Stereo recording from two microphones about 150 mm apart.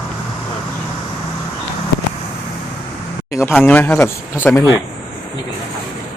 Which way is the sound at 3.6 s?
15° left (ahead or behind).